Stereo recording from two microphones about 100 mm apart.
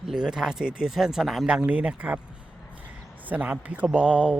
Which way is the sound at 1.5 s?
15° right (ahead or behind).